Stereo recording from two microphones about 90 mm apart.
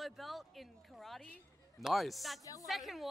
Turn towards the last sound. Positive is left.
turn(degrees=0)  # may be behind; listen again after turning